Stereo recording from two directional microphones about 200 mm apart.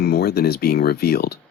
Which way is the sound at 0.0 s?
55° left (ahead or behind).